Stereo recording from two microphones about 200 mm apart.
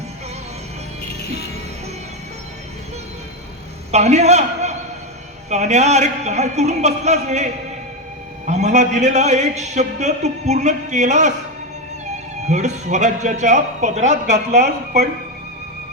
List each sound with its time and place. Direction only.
3.9 s a man's voice: 35° right (ahead or behind)
12.5 s a man's voice: 35° right (ahead or behind)